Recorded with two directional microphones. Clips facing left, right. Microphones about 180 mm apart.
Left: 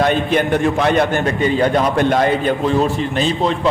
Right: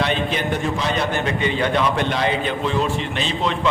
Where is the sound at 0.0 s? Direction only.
50° left (ahead or behind).